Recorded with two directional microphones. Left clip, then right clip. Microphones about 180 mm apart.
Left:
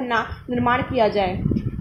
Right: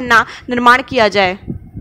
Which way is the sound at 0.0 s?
45° right (ahead or behind).